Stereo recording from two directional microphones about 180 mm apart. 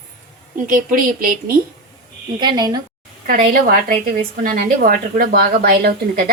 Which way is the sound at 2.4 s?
25° right (ahead or behind).